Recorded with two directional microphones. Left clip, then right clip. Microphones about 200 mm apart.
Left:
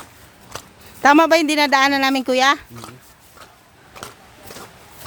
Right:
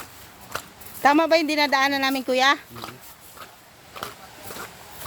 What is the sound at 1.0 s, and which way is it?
Speech, 30° left (ahead or behind).